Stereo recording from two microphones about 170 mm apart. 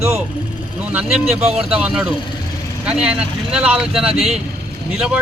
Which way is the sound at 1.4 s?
35° right (ahead or behind).